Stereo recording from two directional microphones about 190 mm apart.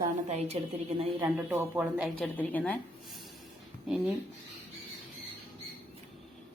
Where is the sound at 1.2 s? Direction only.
10° right (ahead or behind).